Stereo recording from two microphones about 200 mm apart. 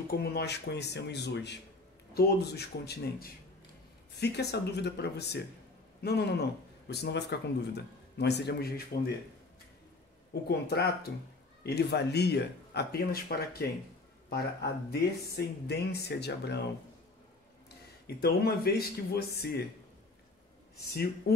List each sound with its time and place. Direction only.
0.1 s speech: 50° left (ahead or behind)
10.5 s speech: 55° left (ahead or behind)
18.0 s speech: 50° left (ahead or behind)